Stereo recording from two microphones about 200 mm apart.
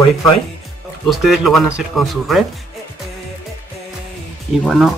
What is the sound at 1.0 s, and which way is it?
Speech, centre (ahead or behind).